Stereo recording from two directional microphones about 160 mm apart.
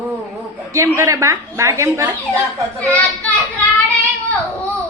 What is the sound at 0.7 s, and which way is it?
A woman's voice, 20° right (ahead or behind).